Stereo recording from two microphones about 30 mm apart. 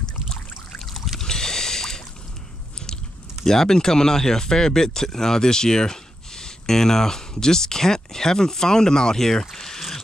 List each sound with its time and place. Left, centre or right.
0.3 s trickle: left
1.2 s boat: centre
3.4 s speech: centre